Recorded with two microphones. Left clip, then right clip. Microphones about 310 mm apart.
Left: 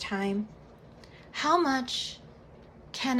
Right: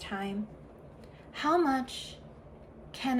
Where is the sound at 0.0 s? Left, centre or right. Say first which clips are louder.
Left 5 dB; centre.